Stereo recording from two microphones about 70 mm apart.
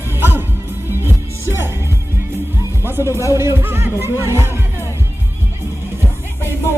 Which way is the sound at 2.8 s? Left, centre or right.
Right.